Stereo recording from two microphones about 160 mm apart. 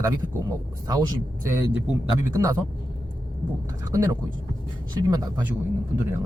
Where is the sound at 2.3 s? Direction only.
20° right (ahead or behind).